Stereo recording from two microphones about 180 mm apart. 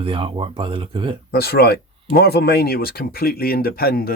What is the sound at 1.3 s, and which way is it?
Speech, 60° left (ahead or behind).